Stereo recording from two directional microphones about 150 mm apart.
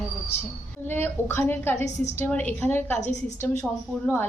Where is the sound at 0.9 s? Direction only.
15° left (ahead or behind).